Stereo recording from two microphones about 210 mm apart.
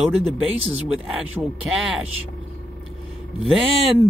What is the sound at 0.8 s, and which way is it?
Speech, 5° right (ahead or behind).